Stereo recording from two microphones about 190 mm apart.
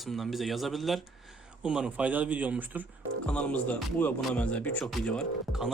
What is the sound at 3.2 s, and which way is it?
A man's voice, 5° left (ahead or behind).